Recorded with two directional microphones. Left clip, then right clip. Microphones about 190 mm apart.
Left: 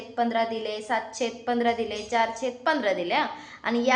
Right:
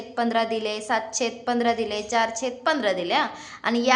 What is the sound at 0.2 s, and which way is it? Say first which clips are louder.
A woman's voice: right 2 dB; 30° right (ahead or behind).